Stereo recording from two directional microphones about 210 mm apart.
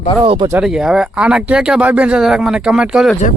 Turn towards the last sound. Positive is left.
turn(degrees=0)  # may be behind; listen again after turning